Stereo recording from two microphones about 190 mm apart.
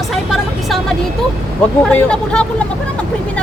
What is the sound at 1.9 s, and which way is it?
Speech, 5° left (ahead or behind).